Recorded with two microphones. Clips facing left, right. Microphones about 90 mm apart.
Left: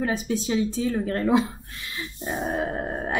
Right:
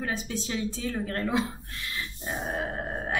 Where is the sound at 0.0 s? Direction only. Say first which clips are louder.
Left 6 dB; 15° left (ahead or behind).